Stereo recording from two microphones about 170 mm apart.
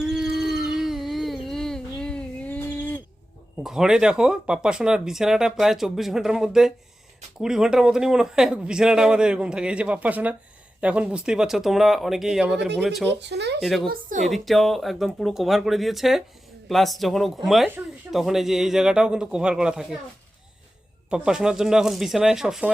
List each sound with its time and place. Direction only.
0.0 s a sound: 5° right (ahead or behind)
3.6 s speech: 5° right (ahead or behind)
13.1 s speech: 90° right
13.6 s speech: centre (ahead or behind)
13.9 s a woman's voice: 50° right (ahead or behind)
14.3 s speech: centre (ahead or behind)
21.1 s speech: 5° right (ahead or behind)